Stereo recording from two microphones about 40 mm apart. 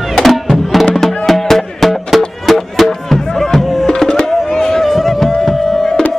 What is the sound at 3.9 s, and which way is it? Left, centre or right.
Music, centre.